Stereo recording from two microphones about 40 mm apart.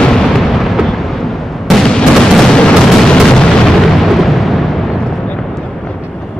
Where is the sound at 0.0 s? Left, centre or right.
Centre.